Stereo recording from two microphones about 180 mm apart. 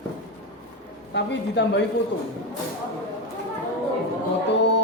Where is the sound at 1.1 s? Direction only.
75° left (ahead or behind).